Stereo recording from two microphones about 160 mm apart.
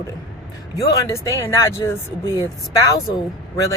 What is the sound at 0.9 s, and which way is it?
Speech, 20° left (ahead or behind).